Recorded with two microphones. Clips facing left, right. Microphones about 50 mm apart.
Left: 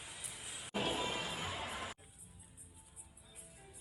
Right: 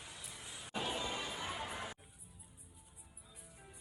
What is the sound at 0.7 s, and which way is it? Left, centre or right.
Music, left.